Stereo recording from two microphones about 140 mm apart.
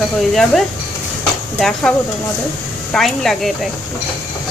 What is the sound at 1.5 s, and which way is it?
Speech, 5° left (ahead or behind).